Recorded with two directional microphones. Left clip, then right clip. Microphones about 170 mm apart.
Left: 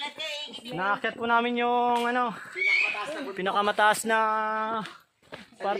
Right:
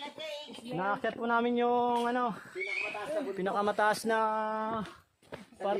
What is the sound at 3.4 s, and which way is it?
Speech, 20° left (ahead or behind).